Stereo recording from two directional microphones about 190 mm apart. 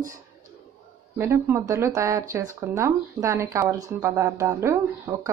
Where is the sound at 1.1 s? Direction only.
15° right (ahead or behind).